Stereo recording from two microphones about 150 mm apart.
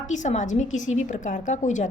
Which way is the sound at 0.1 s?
55° left (ahead or behind).